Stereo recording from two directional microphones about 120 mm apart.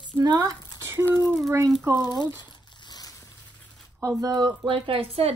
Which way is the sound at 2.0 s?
35° left (ahead or behind).